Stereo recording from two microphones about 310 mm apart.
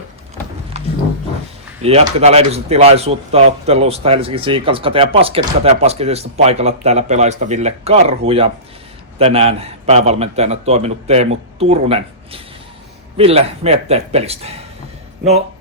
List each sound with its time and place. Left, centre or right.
1.8 s speech: centre